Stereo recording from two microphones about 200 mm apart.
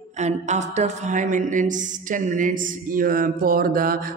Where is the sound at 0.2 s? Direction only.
35° right (ahead or behind).